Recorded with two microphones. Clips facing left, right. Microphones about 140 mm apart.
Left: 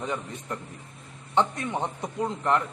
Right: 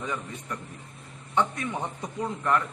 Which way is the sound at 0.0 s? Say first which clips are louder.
Left 2 dB; 25° left (ahead or behind).